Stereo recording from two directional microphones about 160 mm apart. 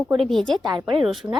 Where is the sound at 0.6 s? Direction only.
25° right (ahead or behind).